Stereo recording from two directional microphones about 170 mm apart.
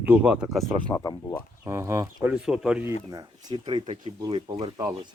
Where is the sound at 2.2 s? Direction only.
5° right (ahead or behind).